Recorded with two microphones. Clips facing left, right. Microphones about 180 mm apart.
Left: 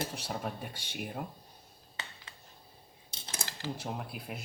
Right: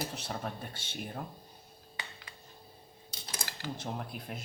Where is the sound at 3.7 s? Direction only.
5° left (ahead or behind).